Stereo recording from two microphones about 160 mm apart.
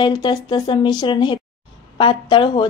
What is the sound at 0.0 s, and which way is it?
A woman's voice, 30° left (ahead or behind).